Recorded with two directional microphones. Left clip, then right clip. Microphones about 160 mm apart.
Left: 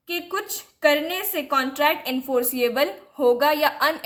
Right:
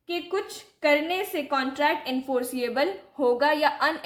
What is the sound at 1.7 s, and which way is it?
A woman's voice, 40° left (ahead or behind).